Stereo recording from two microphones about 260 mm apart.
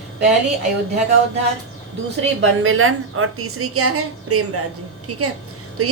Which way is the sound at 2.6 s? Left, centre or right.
Right.